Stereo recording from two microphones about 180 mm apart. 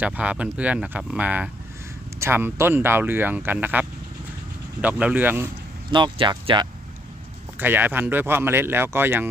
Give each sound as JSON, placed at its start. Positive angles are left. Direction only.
{"t": 0.0, "sound": "speech", "side_deg": -5}
{"t": 5.9, "sound": "speech", "side_deg": -25}
{"t": 7.5, "sound": "speech", "side_deg": -10}